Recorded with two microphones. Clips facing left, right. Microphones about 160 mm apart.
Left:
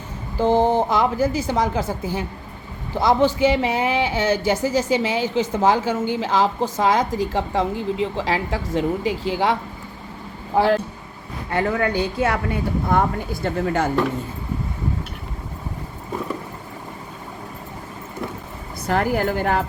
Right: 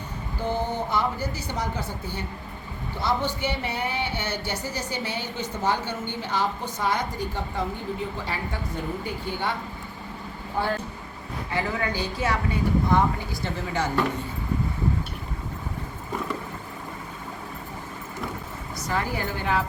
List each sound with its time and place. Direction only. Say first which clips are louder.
0.3 s speech: left 10 dB; 90° left
11.5 s a woman's voice: left 7 dB; 55° left (ahead or behind)
18.8 s a sound: left 7 dB; 60° left (ahead or behind)
19.1 s speech: left 6 dB; 55° left (ahead or behind)